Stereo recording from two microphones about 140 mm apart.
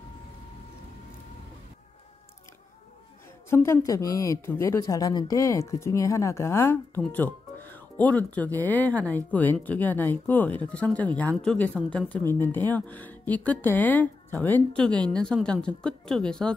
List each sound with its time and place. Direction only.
3.4 s speech: 20° left (ahead or behind)